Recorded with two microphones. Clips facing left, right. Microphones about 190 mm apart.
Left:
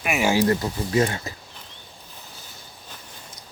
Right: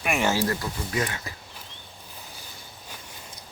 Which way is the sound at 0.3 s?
25° left (ahead or behind).